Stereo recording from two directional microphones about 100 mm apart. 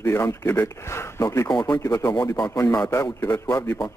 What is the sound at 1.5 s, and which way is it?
Speech, 45° left (ahead or behind).